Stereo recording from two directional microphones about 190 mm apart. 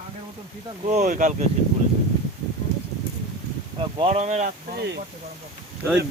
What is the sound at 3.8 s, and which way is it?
Speech, 30° right (ahead or behind).